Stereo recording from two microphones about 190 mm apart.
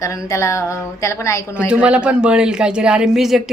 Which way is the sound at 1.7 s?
5° right (ahead or behind).